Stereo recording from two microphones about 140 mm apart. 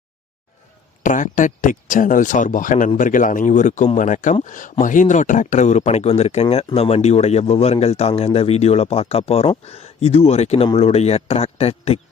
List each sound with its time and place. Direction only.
1.0 s a man's voice: 65° left (ahead or behind); by 11.9 s 45° left (ahead or behind)